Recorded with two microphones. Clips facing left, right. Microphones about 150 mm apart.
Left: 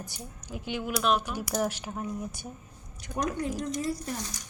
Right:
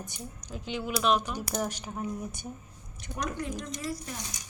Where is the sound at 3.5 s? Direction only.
20° right (ahead or behind).